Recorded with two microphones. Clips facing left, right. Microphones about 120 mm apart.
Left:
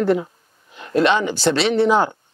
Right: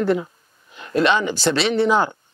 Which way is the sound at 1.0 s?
55° left (ahead or behind).